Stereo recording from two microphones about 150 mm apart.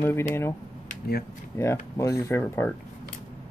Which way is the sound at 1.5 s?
20° left (ahead or behind).